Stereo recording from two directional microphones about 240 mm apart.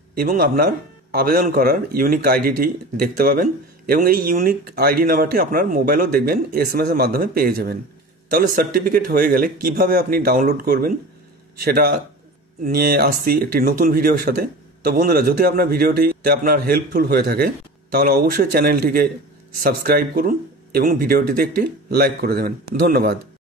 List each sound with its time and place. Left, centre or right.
0.1 s speech: right